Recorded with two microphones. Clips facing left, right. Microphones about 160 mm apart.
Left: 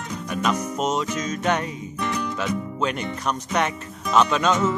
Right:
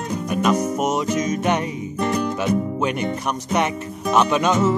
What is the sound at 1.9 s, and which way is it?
Music, 40° right (ahead or behind).